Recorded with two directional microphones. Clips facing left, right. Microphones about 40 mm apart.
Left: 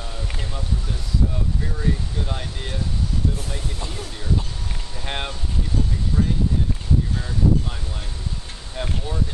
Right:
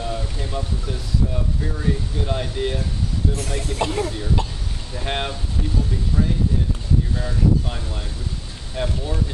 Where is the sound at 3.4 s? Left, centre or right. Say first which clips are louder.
Right 7 dB; right.